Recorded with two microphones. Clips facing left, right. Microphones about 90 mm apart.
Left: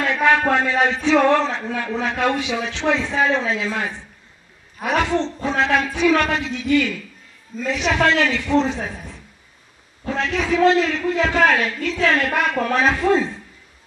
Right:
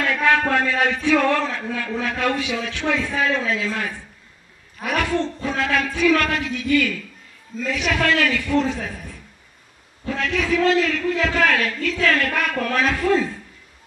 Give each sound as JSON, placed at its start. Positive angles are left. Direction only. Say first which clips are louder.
{"t": 0.0, "sound": "a man's voice", "louder": "left 2 dB", "side_deg": 20}